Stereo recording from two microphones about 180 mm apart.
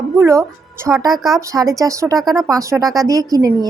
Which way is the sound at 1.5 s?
20° right (ahead or behind).